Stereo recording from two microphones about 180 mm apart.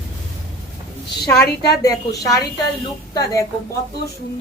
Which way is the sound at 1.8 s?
20° left (ahead or behind).